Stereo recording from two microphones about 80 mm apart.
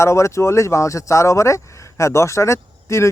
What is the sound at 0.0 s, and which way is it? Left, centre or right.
Speech, left.